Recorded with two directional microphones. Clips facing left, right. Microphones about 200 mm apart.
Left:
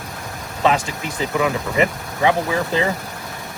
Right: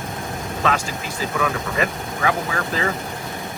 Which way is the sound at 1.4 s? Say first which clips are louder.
Left 4 dB; 20° left (ahead or behind).